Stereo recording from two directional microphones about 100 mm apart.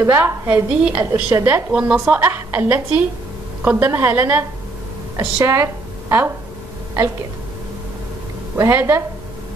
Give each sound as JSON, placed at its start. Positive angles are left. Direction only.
{"t": 0.0, "sound": "a woman's voice", "side_deg": -20}
{"t": 8.5, "sound": "a woman's voice", "side_deg": -25}